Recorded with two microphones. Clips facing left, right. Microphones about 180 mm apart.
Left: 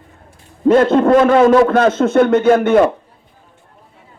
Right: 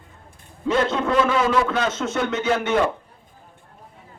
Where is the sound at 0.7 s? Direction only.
50° left (ahead or behind).